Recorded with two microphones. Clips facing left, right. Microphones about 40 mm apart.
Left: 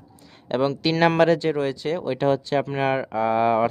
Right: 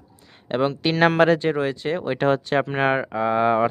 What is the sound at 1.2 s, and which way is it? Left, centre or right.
Speech, right.